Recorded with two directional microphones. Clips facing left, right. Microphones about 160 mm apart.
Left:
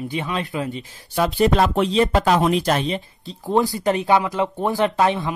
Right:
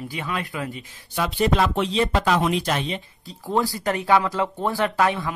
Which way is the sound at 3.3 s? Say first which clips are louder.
Left 4 dB; 20° left (ahead or behind).